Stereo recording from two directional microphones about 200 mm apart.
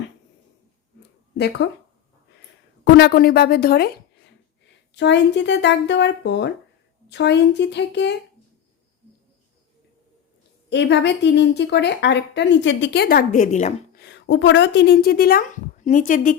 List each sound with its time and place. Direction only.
1.4 s a woman's voice: 60° left (ahead or behind)
2.8 s a woman's voice: 55° left (ahead or behind)
4.9 s a woman's voice: 60° left (ahead or behind)
10.7 s a woman's voice: 60° left (ahead or behind); by 14.0 s 35° left (ahead or behind)
14.0 s a woman's voice: 60° left (ahead or behind); by 16.4 s 40° left (ahead or behind)